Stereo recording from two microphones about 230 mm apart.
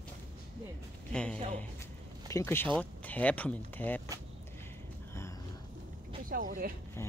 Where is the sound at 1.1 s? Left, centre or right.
Centre.